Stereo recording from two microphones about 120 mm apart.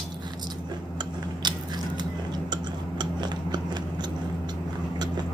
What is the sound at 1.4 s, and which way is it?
Chewing, 35° right (ahead or behind).